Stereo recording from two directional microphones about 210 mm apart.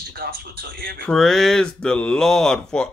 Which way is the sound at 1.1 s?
Centre (ahead or behind).